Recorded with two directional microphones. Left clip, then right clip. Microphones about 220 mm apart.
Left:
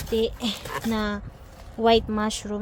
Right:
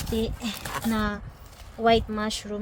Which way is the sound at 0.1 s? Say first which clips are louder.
Left 6 dB; 15° left (ahead or behind).